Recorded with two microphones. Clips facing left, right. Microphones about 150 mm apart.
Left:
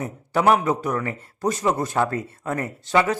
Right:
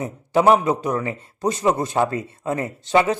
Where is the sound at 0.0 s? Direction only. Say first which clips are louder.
Right 3 dB; 25° right (ahead or behind).